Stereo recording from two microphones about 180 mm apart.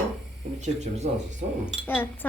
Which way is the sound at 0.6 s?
40° right (ahead or behind).